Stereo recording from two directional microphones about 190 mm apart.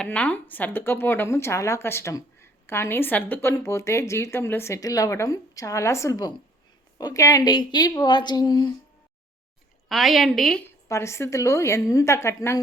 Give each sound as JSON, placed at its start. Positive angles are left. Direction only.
{"t": 0.0, "sound": "a woman's voice", "side_deg": 5}
{"t": 9.9, "sound": "a woman's voice", "side_deg": 0}
{"t": 10.7, "sound": "a woman's voice", "side_deg": 15}